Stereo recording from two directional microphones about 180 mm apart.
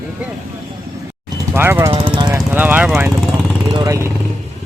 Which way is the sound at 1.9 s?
25° right (ahead or behind).